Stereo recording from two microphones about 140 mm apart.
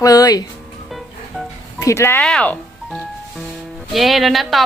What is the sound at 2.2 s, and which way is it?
Speech, 5° left (ahead or behind).